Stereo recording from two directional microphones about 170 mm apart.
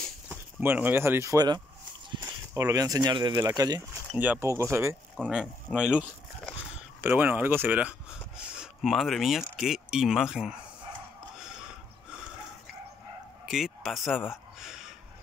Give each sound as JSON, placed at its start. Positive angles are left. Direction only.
{"t": 0.3, "sound": "speech", "side_deg": -10}
{"t": 5.1, "sound": "speech", "side_deg": 0}
{"t": 13.5, "sound": "a sound", "side_deg": 0}